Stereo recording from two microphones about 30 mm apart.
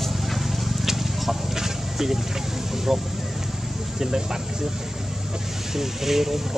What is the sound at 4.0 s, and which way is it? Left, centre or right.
Speech, centre.